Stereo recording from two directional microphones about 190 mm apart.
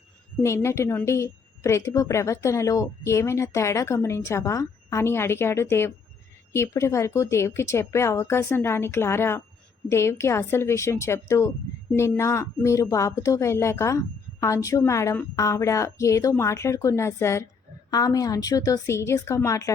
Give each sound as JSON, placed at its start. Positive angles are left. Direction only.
{"t": 0.4, "sound": "a woman's voice", "side_deg": 15}